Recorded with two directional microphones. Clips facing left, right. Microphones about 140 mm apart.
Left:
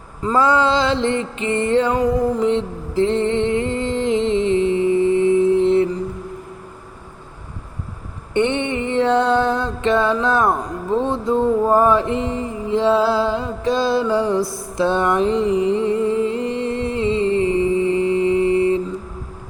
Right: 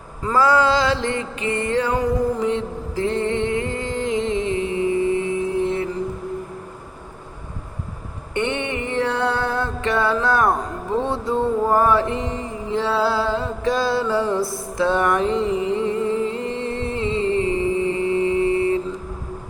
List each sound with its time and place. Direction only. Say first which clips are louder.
0.2 s music: left 1 dB; 20° left (ahead or behind)
2.4 s a sound: left 3 dB; 25° left (ahead or behind)
8.3 s music: left 5 dB; 20° left (ahead or behind)
11.0 s mantra: left 4 dB; 15° left (ahead or behind)
14.8 s music: left 2 dB; 20° left (ahead or behind)